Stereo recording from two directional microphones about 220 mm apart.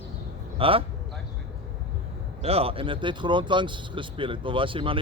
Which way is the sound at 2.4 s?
25° right (ahead or behind).